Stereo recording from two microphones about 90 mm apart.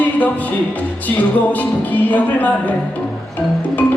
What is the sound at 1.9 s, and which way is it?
Speech, 20° left (ahead or behind).